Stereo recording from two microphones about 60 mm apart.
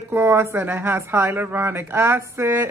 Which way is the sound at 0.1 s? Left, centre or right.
Right.